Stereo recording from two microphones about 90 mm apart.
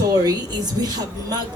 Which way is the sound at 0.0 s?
45° right (ahead or behind).